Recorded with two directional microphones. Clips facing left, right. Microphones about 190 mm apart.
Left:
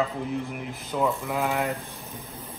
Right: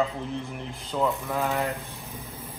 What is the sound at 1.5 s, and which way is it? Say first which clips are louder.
Speech: left 1 dB; 15° left (ahead or behind).